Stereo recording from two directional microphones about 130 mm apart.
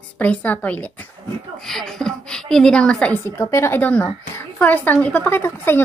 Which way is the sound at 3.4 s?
20° left (ahead or behind).